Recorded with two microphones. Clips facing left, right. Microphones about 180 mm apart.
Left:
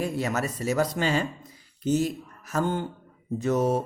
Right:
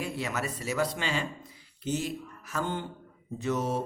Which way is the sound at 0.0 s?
45° left (ahead or behind).